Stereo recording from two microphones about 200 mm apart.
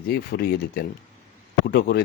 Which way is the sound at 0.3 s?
50° left (ahead or behind).